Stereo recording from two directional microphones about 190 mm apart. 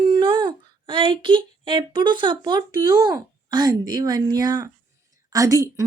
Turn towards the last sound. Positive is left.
turn(degrees=-15)  # may be behind; listen again after turning